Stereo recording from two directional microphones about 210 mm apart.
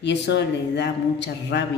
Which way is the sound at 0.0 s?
55° left (ahead or behind).